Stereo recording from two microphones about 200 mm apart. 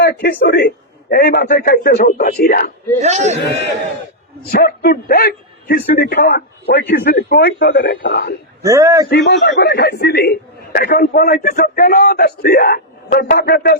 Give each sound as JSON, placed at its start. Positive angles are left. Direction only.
{"t": 0.0, "sound": "a man's voice", "side_deg": 45}
{"t": 3.0, "sound": "a man's voice", "side_deg": -35}
{"t": 4.6, "sound": "a man's voice", "side_deg": 50}
{"t": 8.6, "sound": "speech", "side_deg": -15}
{"t": 9.0, "sound": "a man's voice", "side_deg": 55}